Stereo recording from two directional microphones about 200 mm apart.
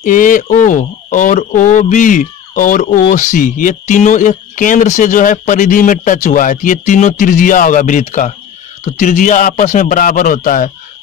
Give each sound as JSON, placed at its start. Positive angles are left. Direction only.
{"t": 0.0, "sound": "speech", "side_deg": 40}